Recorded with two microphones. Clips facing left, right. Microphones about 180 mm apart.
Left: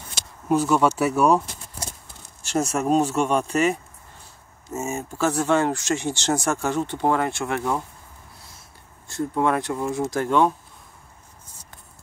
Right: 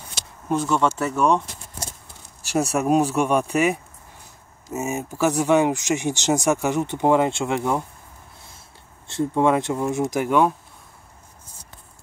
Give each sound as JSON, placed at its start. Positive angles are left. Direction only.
{"t": 0.5, "sound": "speech", "side_deg": 10}
{"t": 2.4, "sound": "speech", "side_deg": -10}
{"t": 9.0, "sound": "speech", "side_deg": -25}